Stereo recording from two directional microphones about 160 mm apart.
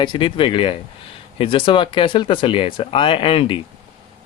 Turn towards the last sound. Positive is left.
turn(degrees=35)  # may be behind; listen again after turning